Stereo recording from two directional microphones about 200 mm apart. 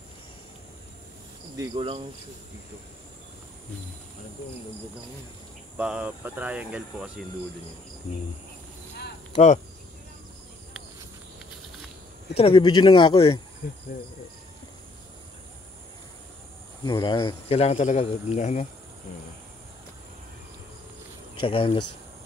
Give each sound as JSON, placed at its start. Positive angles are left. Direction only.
{"t": 1.6, "sound": "cricket", "side_deg": -25}
{"t": 5.8, "sound": "speech", "side_deg": -5}
{"t": 9.3, "sound": "speech", "side_deg": 35}
{"t": 12.4, "sound": "speech", "side_deg": 25}
{"t": 13.6, "sound": "insect", "side_deg": 45}
{"t": 16.8, "sound": "speech", "side_deg": 25}
{"t": 21.4, "sound": "speech", "side_deg": 25}